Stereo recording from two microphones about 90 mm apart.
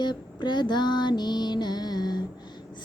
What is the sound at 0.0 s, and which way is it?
Music, 55° left (ahead or behind).